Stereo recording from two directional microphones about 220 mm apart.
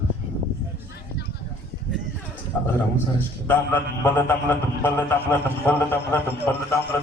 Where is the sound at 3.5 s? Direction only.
10° left (ahead or behind).